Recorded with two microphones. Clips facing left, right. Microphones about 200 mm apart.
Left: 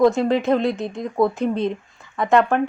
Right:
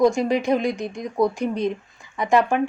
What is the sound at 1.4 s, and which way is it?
Speech, 30° left (ahead or behind).